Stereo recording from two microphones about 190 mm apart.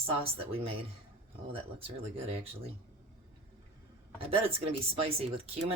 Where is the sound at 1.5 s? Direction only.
30° right (ahead or behind).